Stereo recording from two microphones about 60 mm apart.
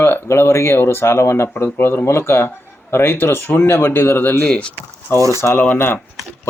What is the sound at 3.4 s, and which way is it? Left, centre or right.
Speech, left.